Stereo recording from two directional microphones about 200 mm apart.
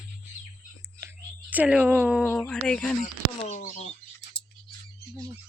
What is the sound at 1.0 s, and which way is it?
Speech, 10° right (ahead or behind).